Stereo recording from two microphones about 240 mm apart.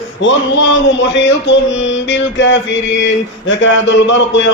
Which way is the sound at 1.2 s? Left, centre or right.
Left.